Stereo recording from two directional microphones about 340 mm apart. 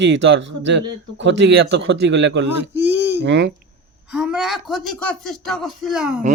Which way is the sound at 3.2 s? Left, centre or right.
Right.